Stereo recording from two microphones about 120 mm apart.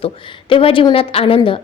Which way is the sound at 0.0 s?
50° left (ahead or behind).